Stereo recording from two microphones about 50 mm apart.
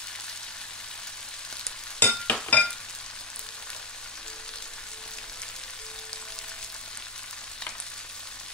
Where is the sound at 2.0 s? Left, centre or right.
Left.